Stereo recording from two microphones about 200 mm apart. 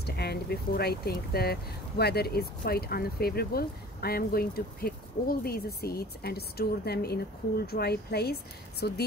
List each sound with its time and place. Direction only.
0.0 s speech: 55° left (ahead or behind)